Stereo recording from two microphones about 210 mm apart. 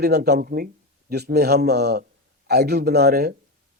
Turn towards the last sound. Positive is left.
turn(degrees=-50)  # may be behind; listen again after turning